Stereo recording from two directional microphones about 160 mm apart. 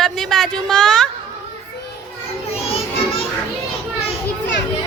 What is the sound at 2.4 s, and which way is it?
Children playing, 40° left (ahead or behind).